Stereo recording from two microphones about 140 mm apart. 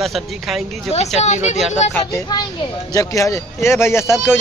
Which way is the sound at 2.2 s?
30° left (ahead or behind).